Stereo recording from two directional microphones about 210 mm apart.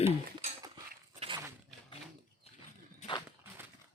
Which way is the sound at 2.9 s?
25° left (ahead or behind).